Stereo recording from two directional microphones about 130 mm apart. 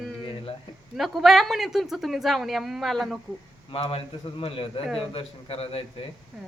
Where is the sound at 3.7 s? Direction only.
45° left (ahead or behind).